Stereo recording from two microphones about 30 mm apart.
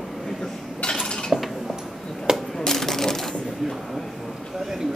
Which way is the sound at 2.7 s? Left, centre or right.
Centre.